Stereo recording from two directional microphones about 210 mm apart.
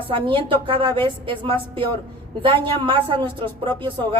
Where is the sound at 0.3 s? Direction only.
25° right (ahead or behind).